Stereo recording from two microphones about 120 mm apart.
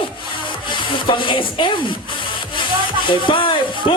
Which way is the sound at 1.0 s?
40° left (ahead or behind).